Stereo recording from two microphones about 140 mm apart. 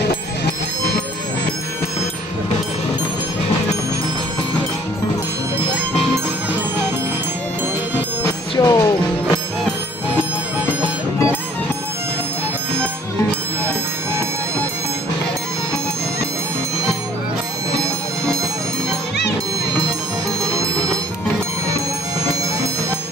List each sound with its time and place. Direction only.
8.5 s music: 25° left (ahead or behind)
20.5 s music: 20° right (ahead or behind)